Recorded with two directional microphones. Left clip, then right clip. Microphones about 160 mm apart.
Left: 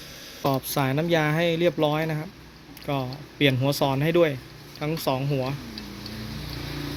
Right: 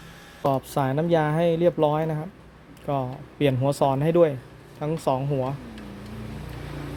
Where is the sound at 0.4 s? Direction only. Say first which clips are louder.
Right 1 dB; 15° right (ahead or behind).